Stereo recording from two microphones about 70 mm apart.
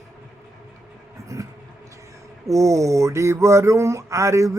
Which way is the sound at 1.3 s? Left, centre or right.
Right.